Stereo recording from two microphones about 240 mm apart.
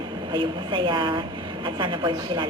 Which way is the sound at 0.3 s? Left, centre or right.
Centre.